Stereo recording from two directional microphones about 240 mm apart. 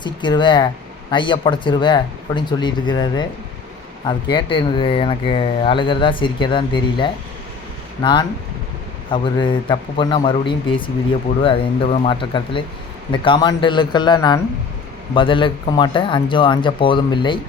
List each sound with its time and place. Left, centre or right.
0.0 s speech: centre